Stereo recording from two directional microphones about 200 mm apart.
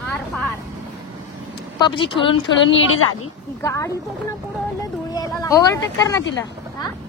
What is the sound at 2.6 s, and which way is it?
Speech, 80° left.